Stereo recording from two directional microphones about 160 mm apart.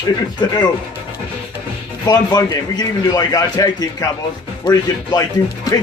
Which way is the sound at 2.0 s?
25° left (ahead or behind).